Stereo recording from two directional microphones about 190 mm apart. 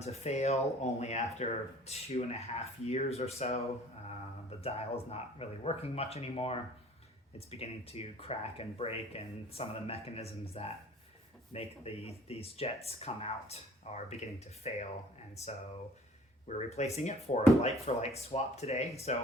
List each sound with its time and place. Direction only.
0.0 s speech: 35° left (ahead or behind)
16.5 s speech: 35° left (ahead or behind)